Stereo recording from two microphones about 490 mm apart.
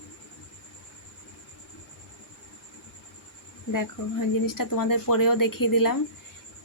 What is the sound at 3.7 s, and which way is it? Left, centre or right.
Speech, left.